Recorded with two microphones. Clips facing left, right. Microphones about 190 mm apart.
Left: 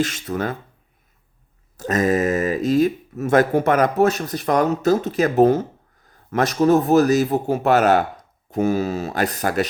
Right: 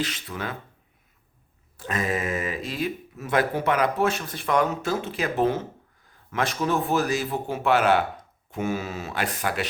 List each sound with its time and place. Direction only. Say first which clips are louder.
0.0 s speech: left 8 dB; 45° left (ahead or behind)
1.7 s a man's voice: left 8 dB; 40° left (ahead or behind)